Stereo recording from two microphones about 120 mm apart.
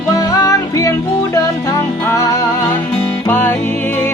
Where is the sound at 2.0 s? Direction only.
25° left (ahead or behind).